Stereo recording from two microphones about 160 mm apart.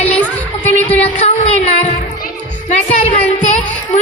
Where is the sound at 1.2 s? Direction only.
45° left (ahead or behind).